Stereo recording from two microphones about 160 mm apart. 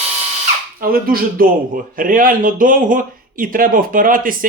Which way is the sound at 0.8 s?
65° right (ahead or behind).